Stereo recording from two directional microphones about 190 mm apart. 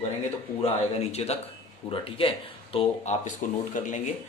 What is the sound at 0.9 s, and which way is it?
A man's voice, 35° left (ahead or behind).